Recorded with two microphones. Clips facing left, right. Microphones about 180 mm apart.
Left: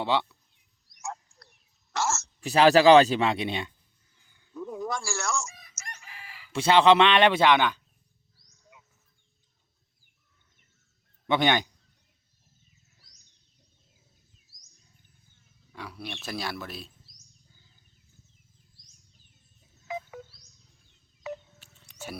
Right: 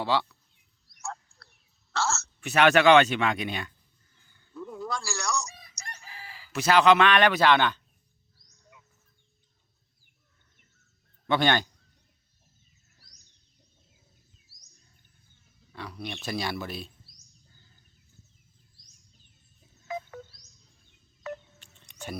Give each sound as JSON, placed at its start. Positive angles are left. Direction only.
{"t": 0.0, "sound": "a man's voice", "side_deg": 20}
{"t": 0.9, "sound": "a sound", "side_deg": 20}
{"t": 2.4, "sound": "speech", "side_deg": 35}
{"t": 4.2, "sound": "a sound", "side_deg": 15}
{"t": 5.5, "sound": "chicken", "side_deg": -30}
{"t": 6.5, "sound": "a man's voice", "side_deg": 25}
{"t": 7.5, "sound": "a man's voice", "side_deg": 10}
{"t": 8.4, "sound": "wild animals", "side_deg": 5}
{"t": 11.3, "sound": "a man's voice", "side_deg": 15}
{"t": 15.7, "sound": "a man's voice", "side_deg": 10}
{"t": 19.9, "sound": "music", "side_deg": 5}
{"t": 21.2, "sound": "music", "side_deg": 5}